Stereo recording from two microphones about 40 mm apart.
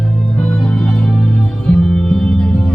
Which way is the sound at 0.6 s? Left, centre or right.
Left.